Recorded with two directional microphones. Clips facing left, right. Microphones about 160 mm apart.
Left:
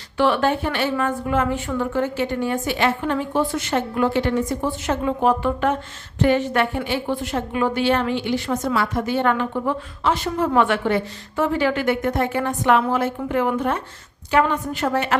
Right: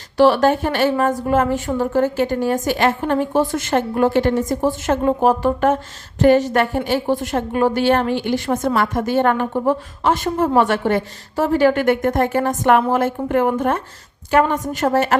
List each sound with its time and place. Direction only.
0.2 s a woman's voice: 40° right (ahead or behind)